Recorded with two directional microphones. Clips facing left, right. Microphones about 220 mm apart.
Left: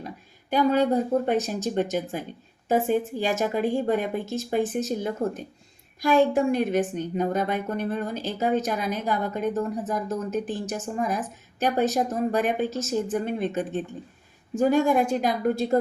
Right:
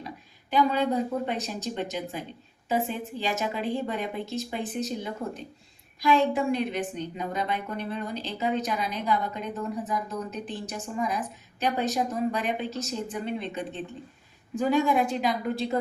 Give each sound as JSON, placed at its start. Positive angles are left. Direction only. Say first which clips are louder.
{"t": 0.5, "sound": "a woman's voice", "louder": "left 3 dB", "side_deg": 45}